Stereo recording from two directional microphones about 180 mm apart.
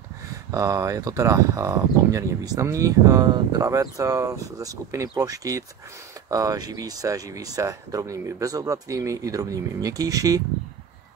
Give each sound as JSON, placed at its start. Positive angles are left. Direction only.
{"t": 0.5, "sound": "speech", "side_deg": -20}